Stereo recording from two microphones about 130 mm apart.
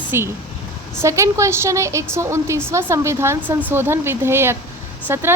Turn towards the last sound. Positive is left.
turn(degrees=-20)  # may be behind; listen again after turning